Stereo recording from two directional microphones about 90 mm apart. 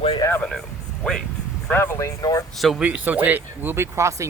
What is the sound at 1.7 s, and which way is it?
Speech, 25° left (ahead or behind).